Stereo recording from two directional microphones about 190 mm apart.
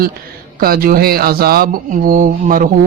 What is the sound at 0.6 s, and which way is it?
Speech, 50° right (ahead or behind).